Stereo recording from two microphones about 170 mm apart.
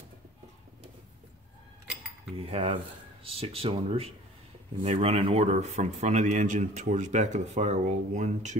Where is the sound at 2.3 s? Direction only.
35° right (ahead or behind).